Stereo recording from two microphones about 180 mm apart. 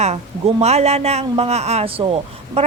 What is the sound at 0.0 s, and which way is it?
A woman's voice, 35° right (ahead or behind).